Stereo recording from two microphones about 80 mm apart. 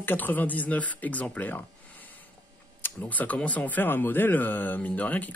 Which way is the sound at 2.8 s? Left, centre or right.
Left.